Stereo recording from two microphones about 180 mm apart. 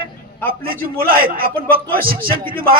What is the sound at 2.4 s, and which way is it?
Speech, 30° right (ahead or behind).